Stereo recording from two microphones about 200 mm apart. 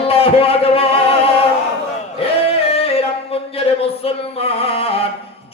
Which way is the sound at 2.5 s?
30° left (ahead or behind).